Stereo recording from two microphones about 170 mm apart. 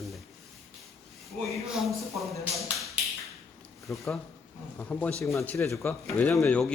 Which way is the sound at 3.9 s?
Centre (ahead or behind).